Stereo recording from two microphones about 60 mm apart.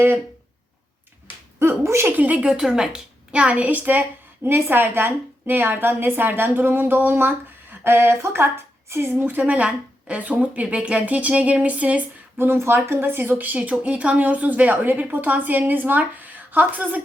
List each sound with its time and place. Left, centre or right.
1.5 s speech: right
2.0 s a woman's voice: right
2.6 s a woman's voice: centre; by 4.0 s right
4.4 s a woman's voice: right
9.4 s a woman's voice: right
12.4 s a woman's voice: right
13.6 s a woman's voice: right